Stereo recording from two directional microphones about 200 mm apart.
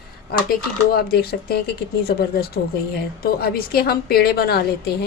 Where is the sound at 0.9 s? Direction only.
50° left (ahead or behind).